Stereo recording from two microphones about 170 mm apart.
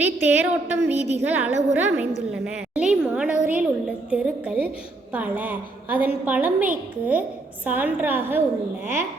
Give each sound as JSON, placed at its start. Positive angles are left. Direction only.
{"t": 0.0, "sound": "a woman's voice", "side_deg": -10}
{"t": 0.9, "sound": "a woman's voice", "side_deg": -40}
{"t": 1.2, "sound": "a woman's voice", "side_deg": -10}